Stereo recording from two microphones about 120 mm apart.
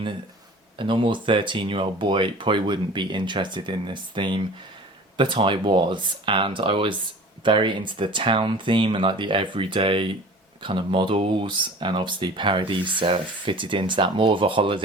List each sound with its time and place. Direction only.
0.8 s speech: 45° right (ahead or behind)